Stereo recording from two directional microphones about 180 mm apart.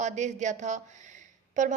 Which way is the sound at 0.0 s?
40° right (ahead or behind).